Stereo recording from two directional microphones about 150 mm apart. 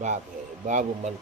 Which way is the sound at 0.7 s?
55° right (ahead or behind).